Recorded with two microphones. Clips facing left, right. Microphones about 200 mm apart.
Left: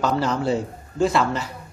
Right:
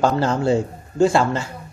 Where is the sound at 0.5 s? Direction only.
30° right (ahead or behind).